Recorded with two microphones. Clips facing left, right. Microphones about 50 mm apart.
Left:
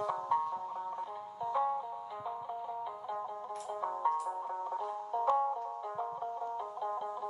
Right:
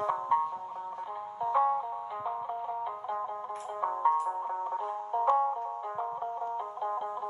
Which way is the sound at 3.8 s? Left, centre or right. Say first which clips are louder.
Right 6 dB; right.